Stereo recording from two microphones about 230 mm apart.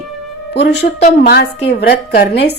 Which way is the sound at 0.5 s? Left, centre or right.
Left.